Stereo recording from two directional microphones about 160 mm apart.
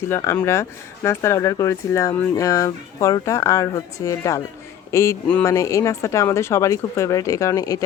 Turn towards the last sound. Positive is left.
turn(degrees=20)  # may be behind; listen again after turning